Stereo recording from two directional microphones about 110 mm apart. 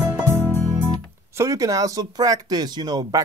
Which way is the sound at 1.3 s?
30° right (ahead or behind).